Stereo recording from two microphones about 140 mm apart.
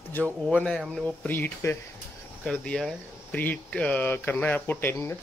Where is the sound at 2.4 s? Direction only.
5° left (ahead or behind).